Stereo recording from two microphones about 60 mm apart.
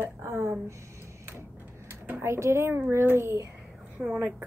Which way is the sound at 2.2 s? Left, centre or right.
Right.